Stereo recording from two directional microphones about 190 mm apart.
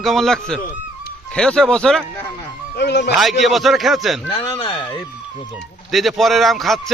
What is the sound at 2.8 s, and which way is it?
Speech, 65° left (ahead or behind).